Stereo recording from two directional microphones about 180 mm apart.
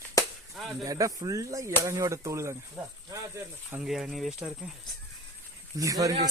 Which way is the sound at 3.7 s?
5° right (ahead or behind).